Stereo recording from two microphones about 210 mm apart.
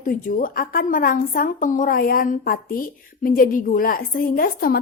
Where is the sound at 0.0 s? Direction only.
40° left (ahead or behind).